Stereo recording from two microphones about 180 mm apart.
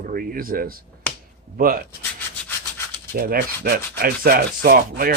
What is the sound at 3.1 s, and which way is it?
Rub, 55° right (ahead or behind).